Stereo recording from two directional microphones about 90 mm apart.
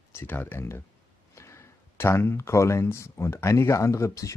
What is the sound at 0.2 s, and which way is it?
Speech, 25° left (ahead or behind).